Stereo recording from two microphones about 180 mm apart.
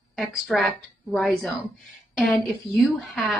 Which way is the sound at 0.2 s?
Centre (ahead or behind).